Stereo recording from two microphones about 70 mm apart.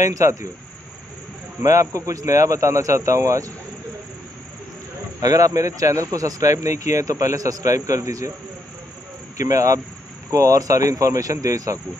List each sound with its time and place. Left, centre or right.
0.0 s a man's voice: right
1.6 s a man's voice: right
5.2 s a man's voice: right
9.4 s a man's voice: right